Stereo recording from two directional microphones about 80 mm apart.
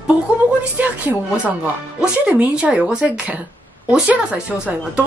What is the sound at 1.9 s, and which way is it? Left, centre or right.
Music, centre.